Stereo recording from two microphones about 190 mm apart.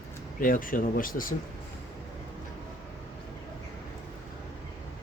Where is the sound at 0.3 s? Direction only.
45° left (ahead or behind).